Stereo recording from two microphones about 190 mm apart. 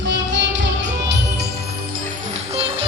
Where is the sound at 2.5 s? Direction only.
30° right (ahead or behind).